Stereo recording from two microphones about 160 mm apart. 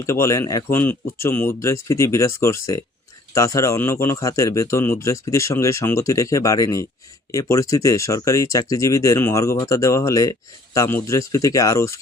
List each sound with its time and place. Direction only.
0.0 s speech: 20° left (ahead or behind)